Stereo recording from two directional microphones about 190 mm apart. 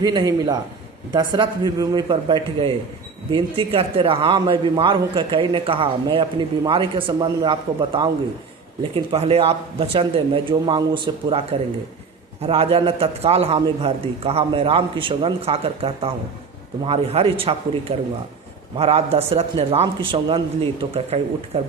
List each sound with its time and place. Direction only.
0.0 s a man's voice: 20° right (ahead or behind)